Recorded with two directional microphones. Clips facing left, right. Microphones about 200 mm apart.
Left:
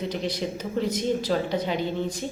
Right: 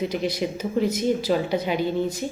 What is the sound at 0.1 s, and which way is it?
Speech, 10° right (ahead or behind).